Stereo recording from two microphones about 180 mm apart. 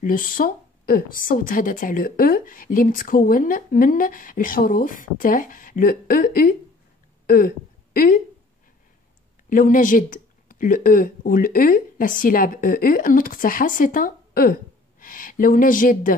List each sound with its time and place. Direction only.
0.0 s a woman's voice: 50° left (ahead or behind)
9.5 s speech: 50° left (ahead or behind)